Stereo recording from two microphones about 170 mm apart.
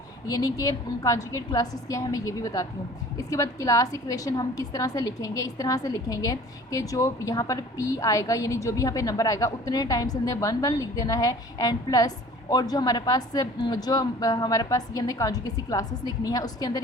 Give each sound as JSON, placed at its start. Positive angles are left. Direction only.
{"t": 0.3, "sound": "a woman's voice", "side_deg": 20}